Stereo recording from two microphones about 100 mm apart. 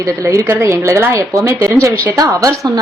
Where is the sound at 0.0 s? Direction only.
35° right (ahead or behind).